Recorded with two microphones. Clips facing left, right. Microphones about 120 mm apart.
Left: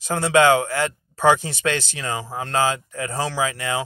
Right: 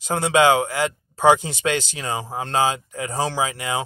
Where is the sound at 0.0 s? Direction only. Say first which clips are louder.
Even; 20° right (ahead or behind).